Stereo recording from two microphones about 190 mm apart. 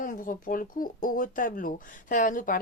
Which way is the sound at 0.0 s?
45° left (ahead or behind).